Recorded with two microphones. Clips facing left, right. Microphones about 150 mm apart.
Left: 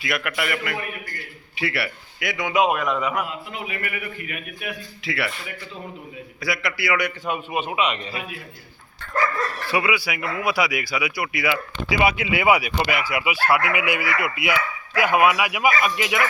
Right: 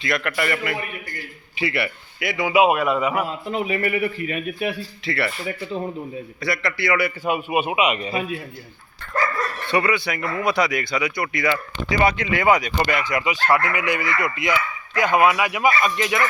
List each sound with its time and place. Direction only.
0.0 s a man's voice: 5° left (ahead or behind)
3.2 s a man's voice: 35° right (ahead or behind)
5.0 s a man's voice: centre (ahead or behind)
6.4 s a man's voice: centre (ahead or behind)
9.7 s speech: 5° left (ahead or behind)